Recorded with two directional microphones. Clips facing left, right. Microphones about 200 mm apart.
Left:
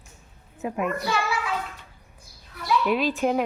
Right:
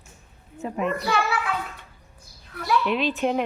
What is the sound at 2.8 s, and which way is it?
Speech, 5° left (ahead or behind).